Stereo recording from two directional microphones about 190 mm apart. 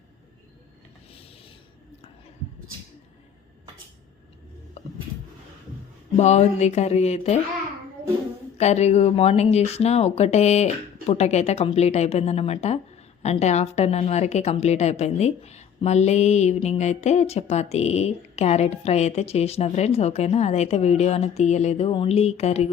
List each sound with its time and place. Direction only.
1.1 s pulleys: 30° left (ahead or behind)
6.1 s speech: 35° left (ahead or behind)
8.5 s speech: 35° left (ahead or behind)